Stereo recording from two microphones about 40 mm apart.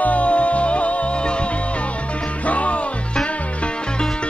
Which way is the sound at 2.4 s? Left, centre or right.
Left.